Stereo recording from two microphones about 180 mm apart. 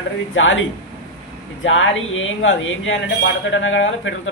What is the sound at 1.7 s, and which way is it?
Speech, 90° left.